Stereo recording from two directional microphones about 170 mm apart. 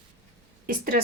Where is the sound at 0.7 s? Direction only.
60° right (ahead or behind).